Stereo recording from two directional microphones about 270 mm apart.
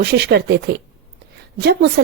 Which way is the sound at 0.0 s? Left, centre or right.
Right.